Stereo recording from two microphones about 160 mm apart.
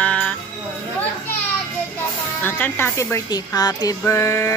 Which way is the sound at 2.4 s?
10° left (ahead or behind).